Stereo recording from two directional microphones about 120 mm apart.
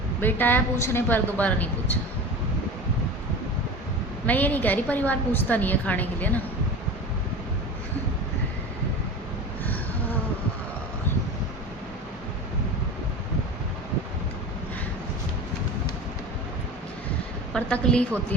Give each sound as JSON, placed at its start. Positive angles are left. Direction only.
{"t": 0.2, "sound": "a woman's voice", "side_deg": 15}
{"t": 4.3, "sound": "a woman's voice", "side_deg": 15}
{"t": 17.5, "sound": "a woman's voice", "side_deg": 5}